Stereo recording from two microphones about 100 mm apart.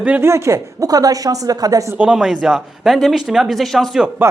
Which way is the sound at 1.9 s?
10° right (ahead or behind).